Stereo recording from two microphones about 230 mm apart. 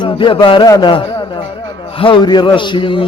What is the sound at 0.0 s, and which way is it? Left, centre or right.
A man's voice, left.